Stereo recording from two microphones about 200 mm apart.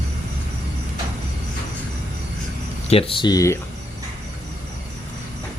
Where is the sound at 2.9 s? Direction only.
30° left (ahead or behind).